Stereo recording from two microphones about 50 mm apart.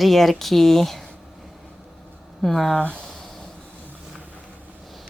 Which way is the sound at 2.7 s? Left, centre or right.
Left.